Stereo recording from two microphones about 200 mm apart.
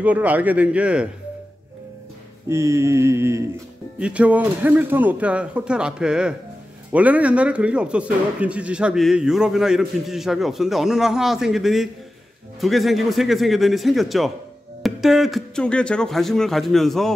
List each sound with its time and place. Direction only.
0.0 s a man's voice: 5° right (ahead or behind)
2.4 s a man's voice: 15° right (ahead or behind); by 17.1 s centre (ahead or behind)